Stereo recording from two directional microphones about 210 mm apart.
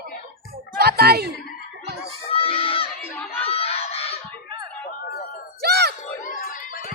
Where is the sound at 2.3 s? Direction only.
25° left (ahead or behind).